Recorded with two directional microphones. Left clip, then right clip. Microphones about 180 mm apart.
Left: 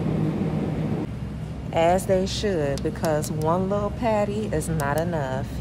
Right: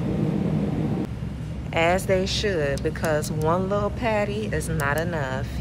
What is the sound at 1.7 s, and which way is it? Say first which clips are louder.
Speech: left 1 dB; 15° left (ahead or behind).